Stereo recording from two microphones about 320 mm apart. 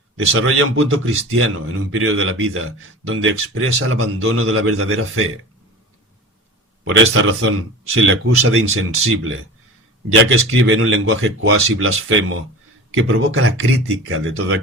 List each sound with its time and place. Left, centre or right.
0.3 s speech: right
7.1 s speech: right
10.5 s speech: right